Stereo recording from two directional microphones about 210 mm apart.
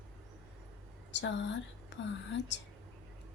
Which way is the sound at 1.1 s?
60° left (ahead or behind).